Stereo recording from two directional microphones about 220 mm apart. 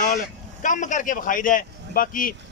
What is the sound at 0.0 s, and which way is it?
A man's voice, 35° left (ahead or behind).